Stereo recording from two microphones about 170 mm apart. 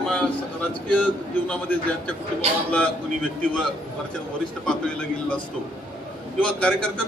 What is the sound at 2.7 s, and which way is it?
Speech, 5° left (ahead or behind).